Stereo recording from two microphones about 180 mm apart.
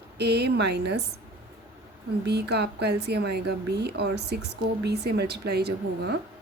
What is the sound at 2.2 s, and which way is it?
Speech, 65° right (ahead or behind).